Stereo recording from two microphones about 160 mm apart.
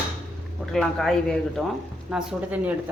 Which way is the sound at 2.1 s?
10° right (ahead or behind).